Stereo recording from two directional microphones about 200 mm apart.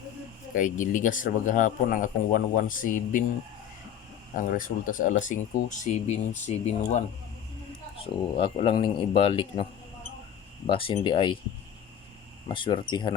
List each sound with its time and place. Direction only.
0.5 s speech: 40° left (ahead or behind)
4.4 s speech: 45° left (ahead or behind)
7.9 s speech: 25° left (ahead or behind)
10.7 s speech: 25° left (ahead or behind)
12.5 s speech: 25° left (ahead or behind)